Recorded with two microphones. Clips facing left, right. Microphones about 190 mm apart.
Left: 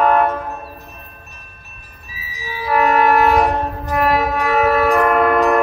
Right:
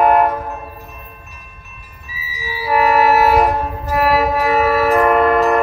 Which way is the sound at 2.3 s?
10° right (ahead or behind).